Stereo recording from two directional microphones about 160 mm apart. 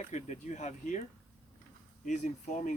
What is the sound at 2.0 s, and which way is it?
Speech, 50° left (ahead or behind).